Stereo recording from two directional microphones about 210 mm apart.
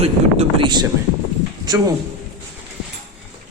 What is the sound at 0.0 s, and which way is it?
Speech, 25° right (ahead or behind).